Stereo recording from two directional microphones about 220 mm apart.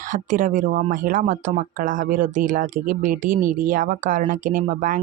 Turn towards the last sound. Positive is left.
turn(degrees=-35)  # may be behind; listen again after turning